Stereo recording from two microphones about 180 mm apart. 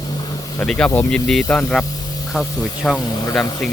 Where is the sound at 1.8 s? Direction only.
20° left (ahead or behind).